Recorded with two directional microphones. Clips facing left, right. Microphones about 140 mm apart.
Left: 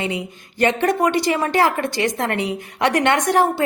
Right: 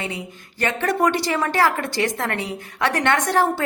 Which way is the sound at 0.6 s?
20° left (ahead or behind).